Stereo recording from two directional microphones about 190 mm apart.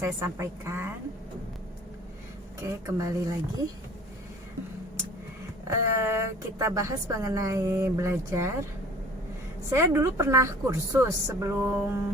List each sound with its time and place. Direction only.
0.0 s a woman's voice: 15° right (ahead or behind)
2.6 s a woman's voice: 15° right (ahead or behind)
5.6 s a woman's voice: 15° right (ahead or behind)
9.6 s a woman's voice: 15° right (ahead or behind)